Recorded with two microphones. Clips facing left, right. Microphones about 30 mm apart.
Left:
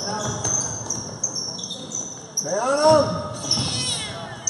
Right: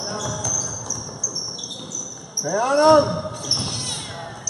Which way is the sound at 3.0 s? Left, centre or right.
Centre.